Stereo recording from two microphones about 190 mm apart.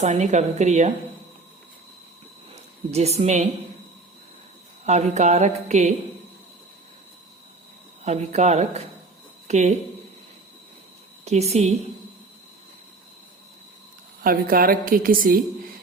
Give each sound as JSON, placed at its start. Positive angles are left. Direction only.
{"t": 0.0, "sound": "music", "side_deg": -40}
{"t": 2.5, "sound": "a sound", "side_deg": -35}
{"t": 4.9, "sound": "music", "side_deg": -35}
{"t": 8.0, "sound": "music", "side_deg": -35}
{"t": 11.3, "sound": "music", "side_deg": -35}
{"t": 14.2, "sound": "a woman's voice", "side_deg": -50}